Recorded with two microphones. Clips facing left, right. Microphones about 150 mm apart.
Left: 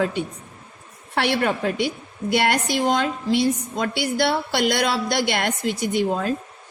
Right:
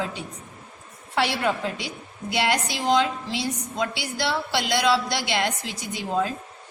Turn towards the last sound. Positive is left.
turn(degrees=55)  # may be behind; listen again after turning